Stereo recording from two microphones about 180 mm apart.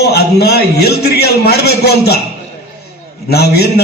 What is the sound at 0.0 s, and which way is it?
A man's voice, 65° left (ahead or behind).